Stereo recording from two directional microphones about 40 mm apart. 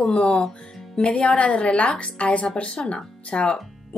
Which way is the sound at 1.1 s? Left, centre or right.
Left.